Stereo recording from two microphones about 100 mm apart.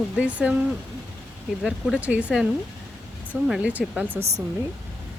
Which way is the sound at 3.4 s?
5° right (ahead or behind).